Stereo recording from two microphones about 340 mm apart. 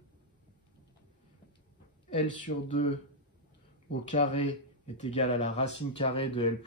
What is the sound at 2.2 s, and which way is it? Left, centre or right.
Speech, centre.